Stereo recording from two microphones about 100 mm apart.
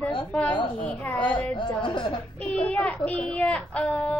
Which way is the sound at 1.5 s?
55° left (ahead or behind).